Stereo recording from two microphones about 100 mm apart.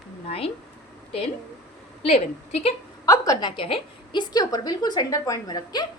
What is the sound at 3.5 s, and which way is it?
A woman's voice, 60° left (ahead or behind).